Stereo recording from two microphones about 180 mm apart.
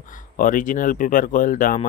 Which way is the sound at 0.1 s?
45° left (ahead or behind).